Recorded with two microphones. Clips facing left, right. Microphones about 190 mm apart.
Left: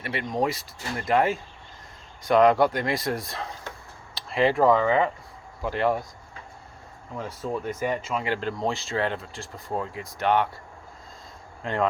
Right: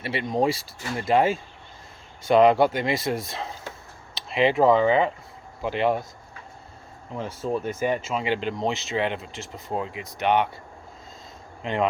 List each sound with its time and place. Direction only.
0.0 s speech: 30° right (ahead or behind)
7.1 s speech: 25° right (ahead or behind)
11.6 s speech: 20° right (ahead or behind)